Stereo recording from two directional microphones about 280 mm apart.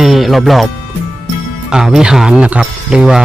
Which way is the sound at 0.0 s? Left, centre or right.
Centre.